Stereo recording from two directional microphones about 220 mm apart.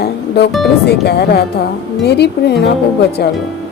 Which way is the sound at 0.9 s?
50° left (ahead or behind).